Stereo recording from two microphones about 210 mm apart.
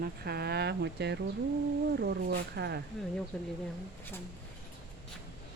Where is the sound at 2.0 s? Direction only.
50° right (ahead or behind).